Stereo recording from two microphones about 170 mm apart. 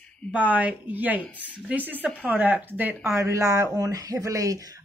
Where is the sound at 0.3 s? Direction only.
10° right (ahead or behind).